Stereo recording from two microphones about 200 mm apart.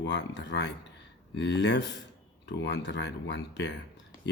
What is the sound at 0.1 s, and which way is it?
Speech, 60° left (ahead or behind).